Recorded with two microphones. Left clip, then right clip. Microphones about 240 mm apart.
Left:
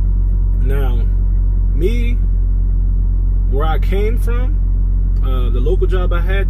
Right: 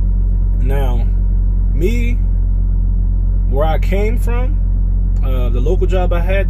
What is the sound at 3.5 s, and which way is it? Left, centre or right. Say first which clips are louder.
Speech: right 3 dB; centre.